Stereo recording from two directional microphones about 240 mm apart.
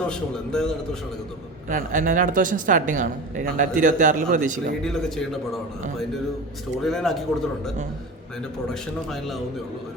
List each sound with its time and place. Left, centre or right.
0.1 s a man's voice: centre
1.7 s a woman's voice: right
4.8 s a man's voice: centre
6.8 s a man's voice: centre
9.0 s a man's voice: centre